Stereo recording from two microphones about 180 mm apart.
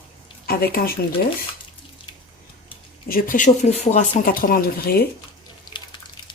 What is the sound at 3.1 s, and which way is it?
Speech, 50° left (ahead or behind).